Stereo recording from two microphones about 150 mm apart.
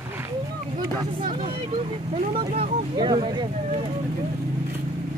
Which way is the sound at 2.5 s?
35° right (ahead or behind).